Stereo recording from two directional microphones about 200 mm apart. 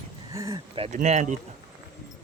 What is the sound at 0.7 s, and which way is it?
Speech, 30° right (ahead or behind).